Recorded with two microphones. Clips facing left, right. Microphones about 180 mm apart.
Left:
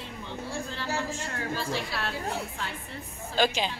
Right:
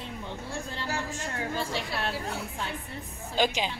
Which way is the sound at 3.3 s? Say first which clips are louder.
Left 1 dB; 15° right (ahead or behind).